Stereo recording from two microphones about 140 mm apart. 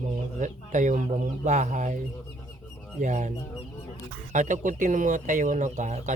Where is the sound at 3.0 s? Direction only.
60° right (ahead or behind).